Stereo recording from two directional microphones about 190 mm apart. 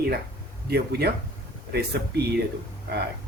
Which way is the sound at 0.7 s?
60° right (ahead or behind).